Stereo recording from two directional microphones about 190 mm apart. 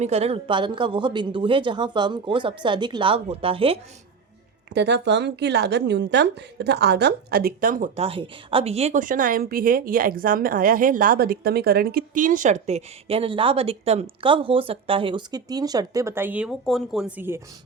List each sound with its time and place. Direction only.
0.0 s a woman's voice: 35° right (ahead or behind)
4.7 s a woman's voice: 65° right (ahead or behind); by 7.9 s 50° right (ahead or behind)
7.9 s speech: 30° right (ahead or behind); by 17.4 s 10° right (ahead or behind)